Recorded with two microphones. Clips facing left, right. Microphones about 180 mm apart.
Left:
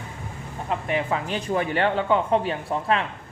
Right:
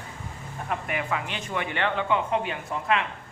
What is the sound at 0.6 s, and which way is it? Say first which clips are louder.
Speech: left 5 dB; 30° left (ahead or behind).